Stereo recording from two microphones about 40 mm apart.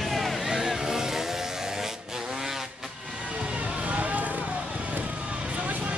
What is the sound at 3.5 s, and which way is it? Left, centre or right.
Vehicle, right.